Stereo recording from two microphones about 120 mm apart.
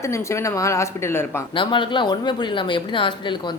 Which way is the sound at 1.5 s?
45° left (ahead or behind).